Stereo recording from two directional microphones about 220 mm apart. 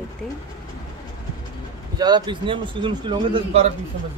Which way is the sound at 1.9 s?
20° right (ahead or behind).